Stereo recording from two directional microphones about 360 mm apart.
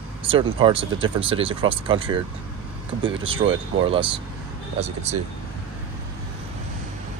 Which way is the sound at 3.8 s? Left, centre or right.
Centre.